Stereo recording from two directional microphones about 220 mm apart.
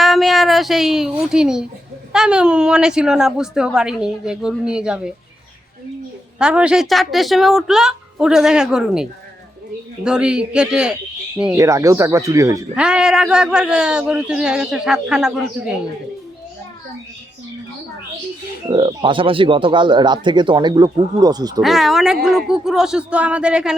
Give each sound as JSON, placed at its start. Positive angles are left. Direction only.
{"t": 0.0, "sound": "a man's voice", "side_deg": 0}
{"t": 6.4, "sound": "a man's voice", "side_deg": -5}
{"t": 11.5, "sound": "a man's voice", "side_deg": -15}
{"t": 18.7, "sound": "speech", "side_deg": -20}
{"t": 21.6, "sound": "a man's voice", "side_deg": 0}